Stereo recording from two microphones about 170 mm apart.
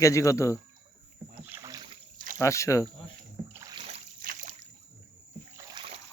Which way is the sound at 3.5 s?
20° right (ahead or behind).